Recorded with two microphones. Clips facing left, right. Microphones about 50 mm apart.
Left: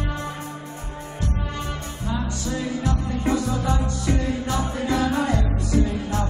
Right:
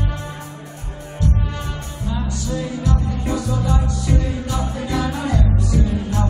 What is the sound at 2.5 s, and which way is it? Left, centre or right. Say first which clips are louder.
Music: right 2 dB; left.